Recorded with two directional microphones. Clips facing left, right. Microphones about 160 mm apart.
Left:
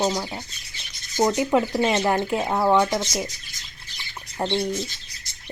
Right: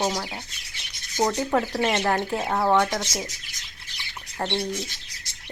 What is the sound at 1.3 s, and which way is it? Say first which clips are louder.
Speech: left 3 dB; 15° left (ahead or behind).